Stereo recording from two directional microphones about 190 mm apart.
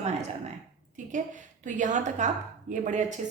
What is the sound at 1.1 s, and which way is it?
A woman's voice, 40° right (ahead or behind).